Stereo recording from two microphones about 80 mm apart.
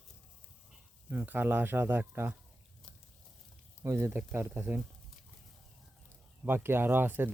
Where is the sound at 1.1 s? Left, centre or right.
Right.